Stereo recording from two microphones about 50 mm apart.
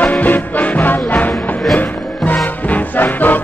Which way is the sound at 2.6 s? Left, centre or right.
Left.